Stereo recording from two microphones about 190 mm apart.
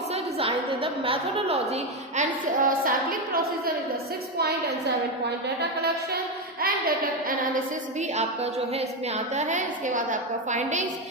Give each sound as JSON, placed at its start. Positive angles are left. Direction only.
{"t": 0.1, "sound": "a woman's voice", "side_deg": -30}
{"t": 6.6, "sound": "a woman's voice", "side_deg": -50}